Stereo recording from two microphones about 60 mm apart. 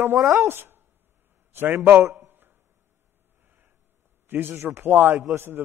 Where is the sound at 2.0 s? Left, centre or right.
Right.